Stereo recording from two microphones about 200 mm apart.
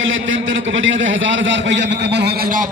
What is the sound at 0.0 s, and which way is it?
A man's voice, 70° right (ahead or behind).